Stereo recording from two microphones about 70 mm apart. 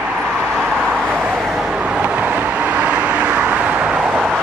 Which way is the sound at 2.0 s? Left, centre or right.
Centre.